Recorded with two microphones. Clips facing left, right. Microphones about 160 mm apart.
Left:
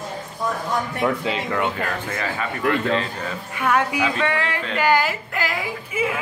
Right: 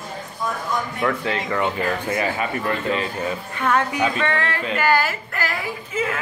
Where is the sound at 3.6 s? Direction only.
10° left (ahead or behind).